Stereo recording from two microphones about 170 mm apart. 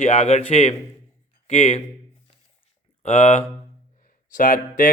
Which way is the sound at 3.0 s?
40° left (ahead or behind).